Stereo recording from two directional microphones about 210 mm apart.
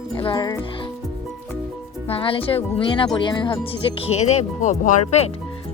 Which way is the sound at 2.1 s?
25° left (ahead or behind).